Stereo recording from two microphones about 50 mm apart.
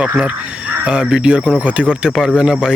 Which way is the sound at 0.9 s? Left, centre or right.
Centre.